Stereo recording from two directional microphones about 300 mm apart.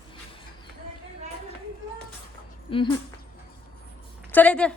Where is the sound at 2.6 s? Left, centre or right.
Centre.